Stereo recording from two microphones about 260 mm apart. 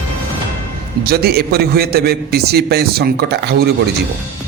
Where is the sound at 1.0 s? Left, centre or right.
Right.